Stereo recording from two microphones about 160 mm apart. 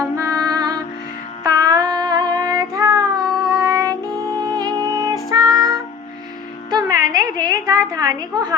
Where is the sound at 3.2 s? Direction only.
5° left (ahead or behind).